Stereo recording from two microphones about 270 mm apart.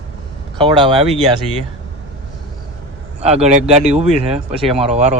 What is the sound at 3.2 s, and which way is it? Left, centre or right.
Speech, right.